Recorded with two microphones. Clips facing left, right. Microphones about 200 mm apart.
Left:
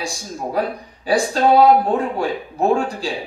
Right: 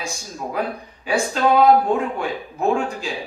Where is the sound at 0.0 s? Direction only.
35° left (ahead or behind).